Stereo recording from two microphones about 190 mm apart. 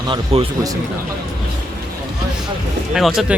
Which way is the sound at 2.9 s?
Centre (ahead or behind).